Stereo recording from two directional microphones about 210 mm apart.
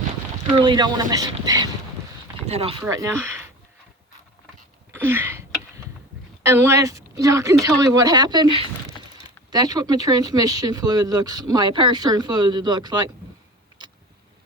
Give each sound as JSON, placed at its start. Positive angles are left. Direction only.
{"t": 0.6, "sound": "speech", "side_deg": -20}
{"t": 2.5, "sound": "speech", "side_deg": -30}
{"t": 2.8, "sound": "speech", "side_deg": -15}
{"t": 4.9, "sound": "a sound", "side_deg": -10}
{"t": 6.4, "sound": "speech", "side_deg": -10}